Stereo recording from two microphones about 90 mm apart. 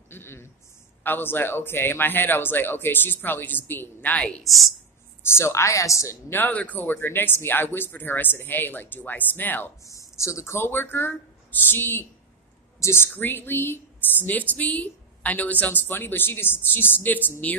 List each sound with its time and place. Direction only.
0.1 s a sound: 25° left (ahead or behind)
1.0 s a woman's voice: 25° left (ahead or behind)
4.2 s a woman's voice: centre (ahead or behind)
5.2 s speech: 30° left (ahead or behind)
6.3 s a woman's voice: 20° left (ahead or behind)
9.8 s a woman's voice: 35° left (ahead or behind); by 17.6 s 15° left (ahead or behind)